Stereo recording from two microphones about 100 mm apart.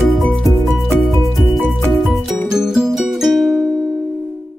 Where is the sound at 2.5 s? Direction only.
5° right (ahead or behind).